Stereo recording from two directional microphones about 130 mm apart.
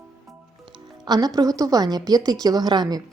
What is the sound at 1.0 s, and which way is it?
A woman's voice, 30° right (ahead or behind).